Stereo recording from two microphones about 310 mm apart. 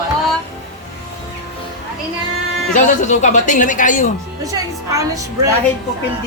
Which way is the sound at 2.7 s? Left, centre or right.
Left.